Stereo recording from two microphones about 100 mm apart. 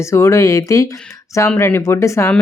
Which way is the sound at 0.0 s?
30° left (ahead or behind).